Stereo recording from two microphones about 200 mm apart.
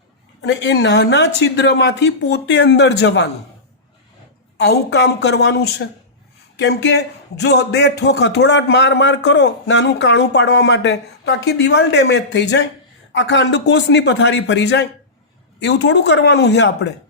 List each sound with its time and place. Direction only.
0.4 s a man's voice: 60° left (ahead or behind)
4.5 s a man's voice: 55° left (ahead or behind)